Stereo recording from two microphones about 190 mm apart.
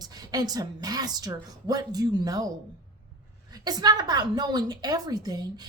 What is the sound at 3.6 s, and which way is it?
Speech, 20° right (ahead or behind).